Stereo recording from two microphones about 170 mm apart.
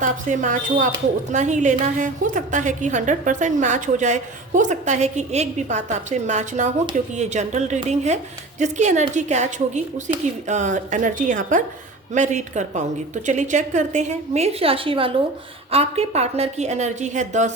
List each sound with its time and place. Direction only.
0.0 s a woman's voice: 50° right (ahead or behind)